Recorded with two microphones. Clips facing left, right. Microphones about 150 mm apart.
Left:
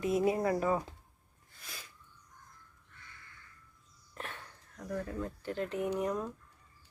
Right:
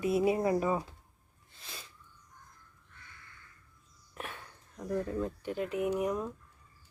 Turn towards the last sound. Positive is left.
turn(degrees=-10)  # may be behind; listen again after turning